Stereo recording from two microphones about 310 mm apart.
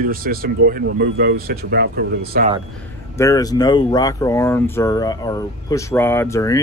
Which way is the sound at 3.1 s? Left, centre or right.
Centre.